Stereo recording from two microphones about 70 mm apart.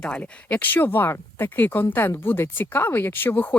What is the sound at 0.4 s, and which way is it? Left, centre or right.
Speech, left.